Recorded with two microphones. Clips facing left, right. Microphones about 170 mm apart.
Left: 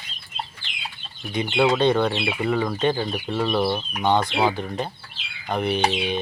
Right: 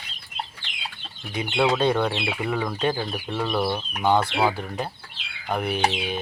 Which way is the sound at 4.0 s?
5° right (ahead or behind).